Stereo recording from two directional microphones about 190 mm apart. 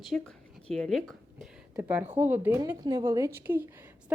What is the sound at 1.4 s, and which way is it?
A woman's voice, 10° right (ahead or behind).